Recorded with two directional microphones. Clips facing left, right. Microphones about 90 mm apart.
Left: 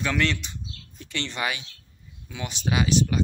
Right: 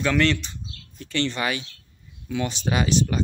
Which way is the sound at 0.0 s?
10° left (ahead or behind).